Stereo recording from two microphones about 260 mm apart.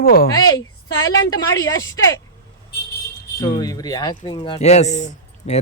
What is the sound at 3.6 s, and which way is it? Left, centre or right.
A woman's voice, centre.